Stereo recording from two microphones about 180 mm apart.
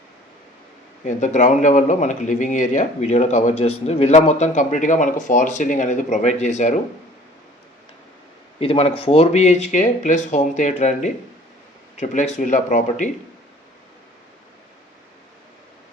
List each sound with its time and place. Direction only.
1.0 s speech: 45° left (ahead or behind)
8.5 s speech: 30° left (ahead or behind)